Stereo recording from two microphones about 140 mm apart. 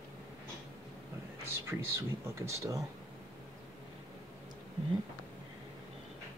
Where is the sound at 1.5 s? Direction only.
20° right (ahead or behind).